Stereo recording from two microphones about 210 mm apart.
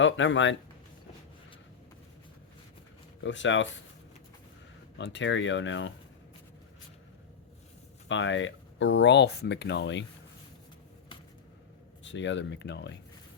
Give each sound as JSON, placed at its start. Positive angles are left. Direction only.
{"t": 0.0, "sound": "speech", "side_deg": 60}
{"t": 3.2, "sound": "speech", "side_deg": 60}
{"t": 4.9, "sound": "speech", "side_deg": 55}
{"t": 8.0, "sound": "speech", "side_deg": 60}
{"t": 12.0, "sound": "speech", "side_deg": 60}